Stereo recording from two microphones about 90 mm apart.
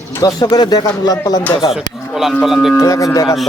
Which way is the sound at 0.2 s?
45° left (ahead or behind).